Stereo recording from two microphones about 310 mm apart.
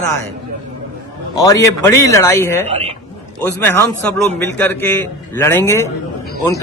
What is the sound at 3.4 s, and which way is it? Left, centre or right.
Speech, centre.